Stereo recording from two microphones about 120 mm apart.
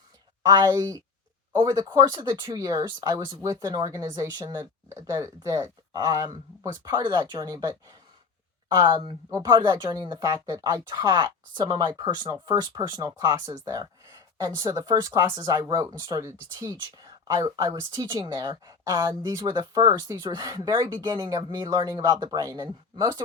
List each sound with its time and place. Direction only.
0.4 s a woman's voice: 30° right (ahead or behind)